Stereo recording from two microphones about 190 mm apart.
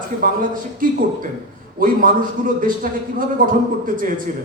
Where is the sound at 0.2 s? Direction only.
45° right (ahead or behind).